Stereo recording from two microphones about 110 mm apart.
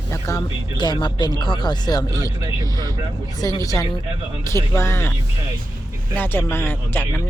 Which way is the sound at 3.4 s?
30° left (ahead or behind).